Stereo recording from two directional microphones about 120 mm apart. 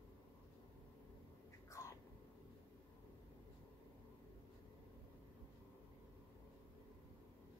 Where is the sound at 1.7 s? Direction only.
25° left (ahead or behind).